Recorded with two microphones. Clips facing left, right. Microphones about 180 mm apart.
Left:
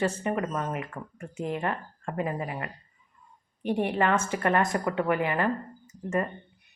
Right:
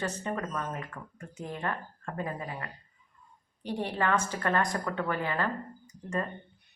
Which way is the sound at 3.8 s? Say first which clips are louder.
Left 3 dB; 20° left (ahead or behind).